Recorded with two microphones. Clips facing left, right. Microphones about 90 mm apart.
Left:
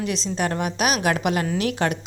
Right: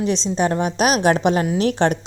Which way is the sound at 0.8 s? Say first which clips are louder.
Right 6 dB; 35° right (ahead or behind).